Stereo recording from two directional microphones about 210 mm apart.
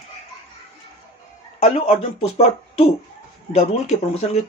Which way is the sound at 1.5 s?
30° left (ahead or behind).